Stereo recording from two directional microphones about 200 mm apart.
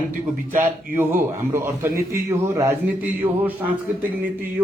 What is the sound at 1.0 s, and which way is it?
A man's voice, 10° right (ahead or behind).